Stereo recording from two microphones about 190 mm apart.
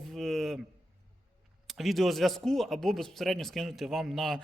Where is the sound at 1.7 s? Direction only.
Centre (ahead or behind).